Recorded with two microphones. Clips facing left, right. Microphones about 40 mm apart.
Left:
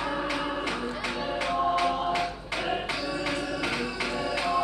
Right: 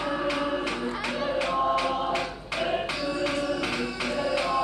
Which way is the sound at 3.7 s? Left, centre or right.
Centre.